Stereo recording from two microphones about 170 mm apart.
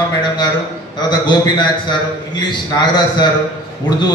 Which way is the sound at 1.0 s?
25° left (ahead or behind).